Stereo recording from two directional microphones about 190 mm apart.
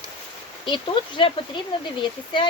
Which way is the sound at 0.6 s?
25° left (ahead or behind).